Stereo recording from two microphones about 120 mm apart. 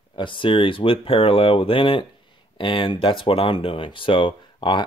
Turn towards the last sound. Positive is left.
turn(degrees=45)  # may be behind; listen again after turning